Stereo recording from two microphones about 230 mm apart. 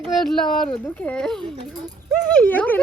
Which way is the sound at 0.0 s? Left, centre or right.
Centre.